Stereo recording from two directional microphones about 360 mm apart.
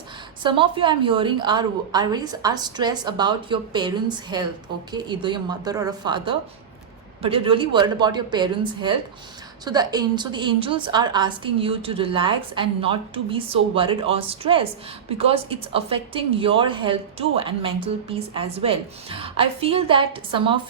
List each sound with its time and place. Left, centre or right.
0.4 s speech: centre